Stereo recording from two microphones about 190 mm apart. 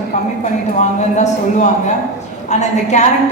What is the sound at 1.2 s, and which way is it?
A woman's voice, 40° left (ahead or behind).